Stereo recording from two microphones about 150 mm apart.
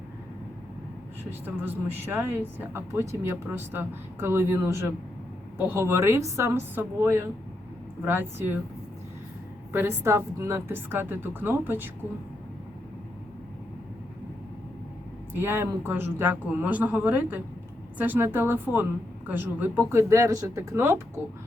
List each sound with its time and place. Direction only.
1.2 s speech: 10° right (ahead or behind)
9.7 s speech: 15° right (ahead or behind)
15.3 s speech: 15° right (ahead or behind)